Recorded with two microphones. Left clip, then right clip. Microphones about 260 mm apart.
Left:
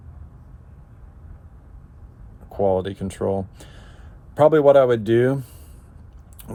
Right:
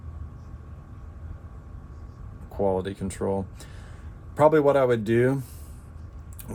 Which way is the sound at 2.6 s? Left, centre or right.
Left.